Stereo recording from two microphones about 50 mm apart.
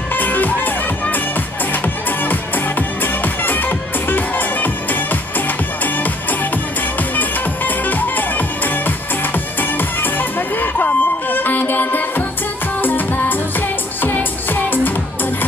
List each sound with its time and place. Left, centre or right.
0.1 s music: left
7.2 s music: left